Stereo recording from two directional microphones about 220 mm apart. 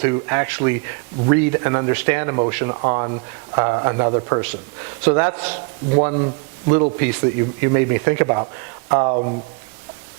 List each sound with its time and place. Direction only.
0.0 s speech: 20° right (ahead or behind)
2.8 s speech: 25° right (ahead or behind)
5.0 s speech: 15° right (ahead or behind)
6.0 s speech: 25° right (ahead or behind)
7.0 s speech: 15° right (ahead or behind)